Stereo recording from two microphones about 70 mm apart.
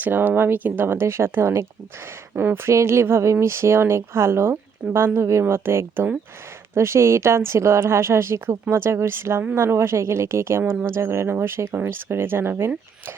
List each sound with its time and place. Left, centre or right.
0.0 s speech: right
2.3 s speech: right
2.6 s speech: right